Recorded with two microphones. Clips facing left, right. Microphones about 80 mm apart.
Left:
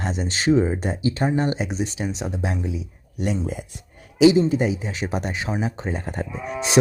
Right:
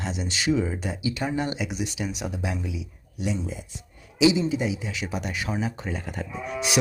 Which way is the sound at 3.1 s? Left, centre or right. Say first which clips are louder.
Left 4 dB; left.